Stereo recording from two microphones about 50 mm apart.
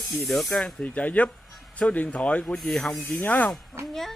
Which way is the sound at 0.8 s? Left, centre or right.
Left.